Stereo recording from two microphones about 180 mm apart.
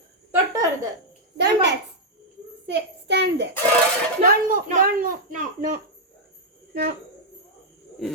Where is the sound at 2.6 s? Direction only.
75° right (ahead or behind).